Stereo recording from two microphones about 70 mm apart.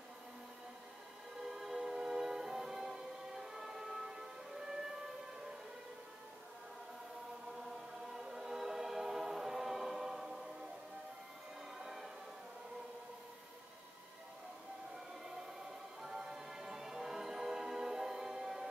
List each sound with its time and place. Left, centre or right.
1.4 s music: centre
8.1 s choir: centre
11.8 s music: centre
16.0 s music: centre